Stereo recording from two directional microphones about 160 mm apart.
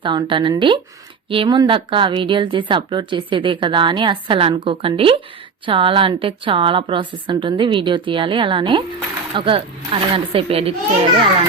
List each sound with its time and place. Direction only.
0.0 s a woman's voice: 30° right (ahead or behind)